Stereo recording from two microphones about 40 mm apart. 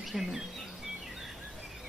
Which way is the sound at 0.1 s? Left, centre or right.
Centre.